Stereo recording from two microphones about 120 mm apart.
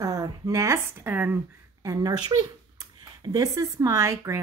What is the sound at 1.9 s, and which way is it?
Speech, 35° right (ahead or behind).